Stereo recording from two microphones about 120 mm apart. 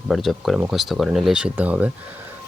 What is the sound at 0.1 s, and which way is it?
Speech, centre (ahead or behind).